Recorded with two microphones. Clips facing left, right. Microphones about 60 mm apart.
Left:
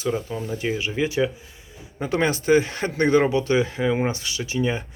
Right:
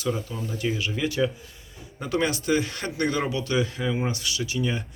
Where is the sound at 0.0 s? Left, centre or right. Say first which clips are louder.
Left 3 dB; left.